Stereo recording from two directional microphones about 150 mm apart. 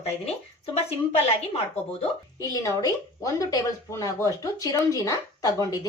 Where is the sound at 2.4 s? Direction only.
25° left (ahead or behind).